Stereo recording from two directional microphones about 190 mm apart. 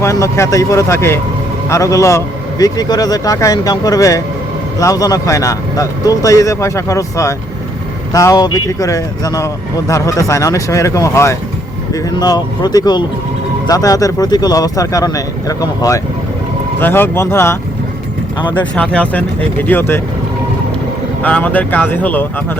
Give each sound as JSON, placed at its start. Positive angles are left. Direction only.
{"t": 0.0, "sound": "a man's voice", "side_deg": 15}
{"t": 21.2, "sound": "speech", "side_deg": 10}